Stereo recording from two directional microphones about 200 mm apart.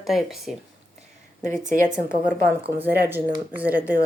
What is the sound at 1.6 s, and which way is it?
A woman's voice, 40° right (ahead or behind).